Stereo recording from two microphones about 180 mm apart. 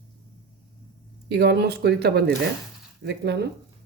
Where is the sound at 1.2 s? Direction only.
65° right (ahead or behind).